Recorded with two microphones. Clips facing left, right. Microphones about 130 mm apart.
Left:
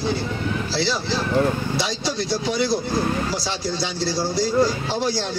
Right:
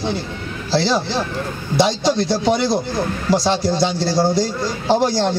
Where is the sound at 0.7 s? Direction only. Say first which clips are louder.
Right 9 dB; 45° right (ahead or behind).